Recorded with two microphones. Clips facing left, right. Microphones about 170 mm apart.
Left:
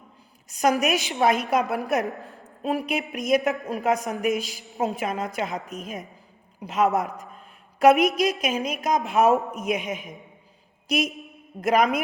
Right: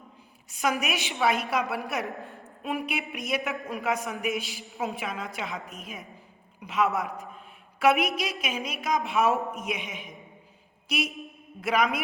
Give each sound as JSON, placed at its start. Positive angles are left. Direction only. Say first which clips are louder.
{"t": 0.5, "sound": "a woman's voice", "louder": "left 6 dB", "side_deg": 40}
{"t": 10.8, "sound": "a sound", "louder": "left 6 dB", "side_deg": 40}
{"t": 11.6, "sound": "a woman's voice", "louder": "left 6 dB", "side_deg": 55}